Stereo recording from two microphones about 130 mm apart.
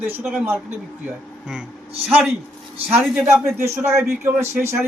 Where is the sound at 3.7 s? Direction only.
20° right (ahead or behind).